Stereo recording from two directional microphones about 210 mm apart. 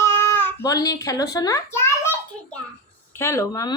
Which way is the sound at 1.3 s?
15° left (ahead or behind).